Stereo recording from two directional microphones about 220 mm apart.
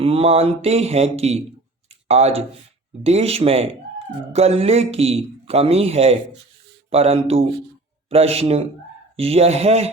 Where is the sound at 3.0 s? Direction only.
25° right (ahead or behind).